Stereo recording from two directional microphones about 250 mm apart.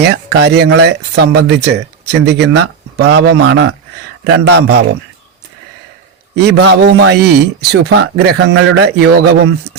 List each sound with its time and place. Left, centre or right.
0.0 s speech: right
6.3 s speech: right